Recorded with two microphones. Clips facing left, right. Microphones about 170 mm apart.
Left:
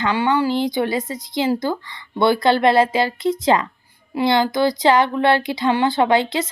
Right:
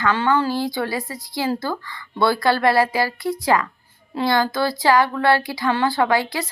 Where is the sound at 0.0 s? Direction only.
15° left (ahead or behind).